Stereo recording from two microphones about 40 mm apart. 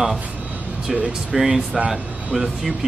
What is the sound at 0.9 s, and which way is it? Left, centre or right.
Speech, right.